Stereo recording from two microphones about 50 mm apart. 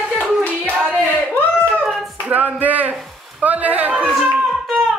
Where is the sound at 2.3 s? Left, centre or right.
Right.